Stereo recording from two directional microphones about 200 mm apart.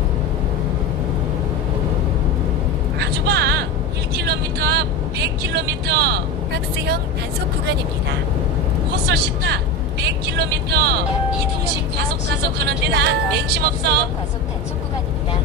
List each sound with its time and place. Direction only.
3.0 s a sound: 55° right (ahead or behind)
4.2 s vehicle: 55° right (ahead or behind)
9.0 s speech: 55° right (ahead or behind)
12.6 s speech: 55° right (ahead or behind)